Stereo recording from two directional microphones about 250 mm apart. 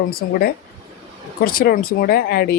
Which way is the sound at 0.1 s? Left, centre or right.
Left.